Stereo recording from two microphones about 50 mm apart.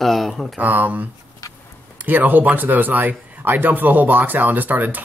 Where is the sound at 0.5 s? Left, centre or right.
Right.